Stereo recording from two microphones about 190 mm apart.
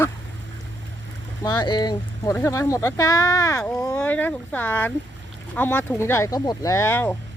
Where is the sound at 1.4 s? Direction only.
20° left (ahead or behind).